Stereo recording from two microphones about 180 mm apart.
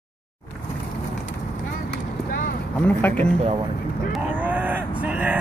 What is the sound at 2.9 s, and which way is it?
Speech, 10° left (ahead or behind).